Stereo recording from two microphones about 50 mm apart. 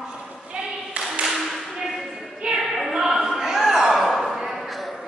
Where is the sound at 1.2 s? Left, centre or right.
Centre.